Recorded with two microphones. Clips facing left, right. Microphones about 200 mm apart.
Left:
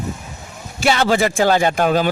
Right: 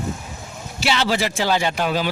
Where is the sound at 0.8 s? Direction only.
50° left (ahead or behind).